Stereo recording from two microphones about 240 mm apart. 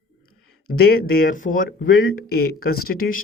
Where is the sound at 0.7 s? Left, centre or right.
Left.